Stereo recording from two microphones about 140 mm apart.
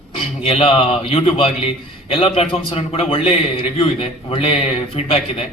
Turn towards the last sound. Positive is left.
turn(degrees=45)  # may be behind; listen again after turning